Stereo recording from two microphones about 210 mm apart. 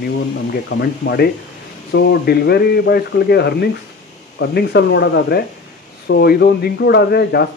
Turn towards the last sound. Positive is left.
turn(degrees=50)  # may be behind; listen again after turning